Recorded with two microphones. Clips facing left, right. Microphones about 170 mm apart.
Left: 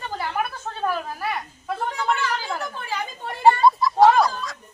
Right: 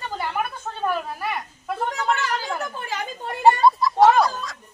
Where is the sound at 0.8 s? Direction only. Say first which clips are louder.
Even; centre (ahead or behind).